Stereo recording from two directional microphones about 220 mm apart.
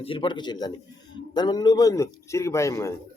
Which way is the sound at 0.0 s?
25° left (ahead or behind).